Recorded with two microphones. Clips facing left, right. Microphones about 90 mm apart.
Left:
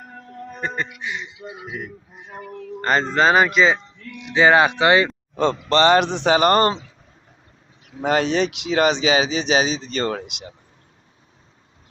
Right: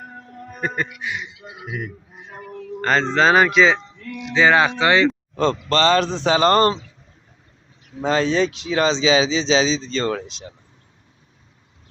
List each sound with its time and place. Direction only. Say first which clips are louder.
0.3 s speech: right 1 dB; 10° right (ahead or behind)
4.4 s speech: left 1 dB; 20° left (ahead or behind)
8.0 s speech: even; 65° left (ahead or behind)
8.9 s speech: right 1 dB; 55° left (ahead or behind)